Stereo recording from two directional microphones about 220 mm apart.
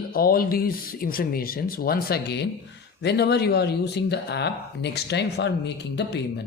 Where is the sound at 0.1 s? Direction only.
40° left (ahead or behind).